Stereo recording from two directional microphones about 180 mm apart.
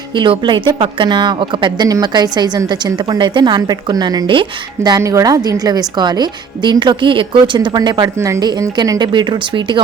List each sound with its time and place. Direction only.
0.1 s speech: 25° right (ahead or behind)